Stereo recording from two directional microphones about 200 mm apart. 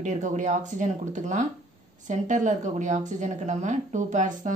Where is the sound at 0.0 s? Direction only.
35° right (ahead or behind).